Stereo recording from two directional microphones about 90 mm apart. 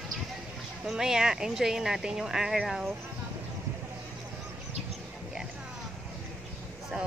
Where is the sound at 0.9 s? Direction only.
5° right (ahead or behind).